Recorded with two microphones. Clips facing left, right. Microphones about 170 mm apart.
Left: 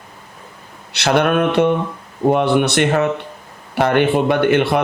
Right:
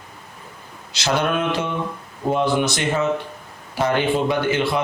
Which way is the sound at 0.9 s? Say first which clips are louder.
Left 6 dB; 65° left (ahead or behind).